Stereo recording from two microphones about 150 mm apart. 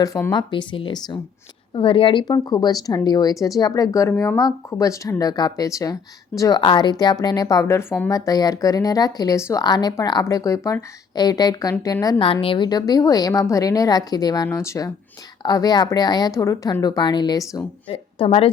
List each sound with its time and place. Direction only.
0.0 s speech: 25° left (ahead or behind)
12.2 s speech: 35° left (ahead or behind)
18.2 s speech: 40° left (ahead or behind)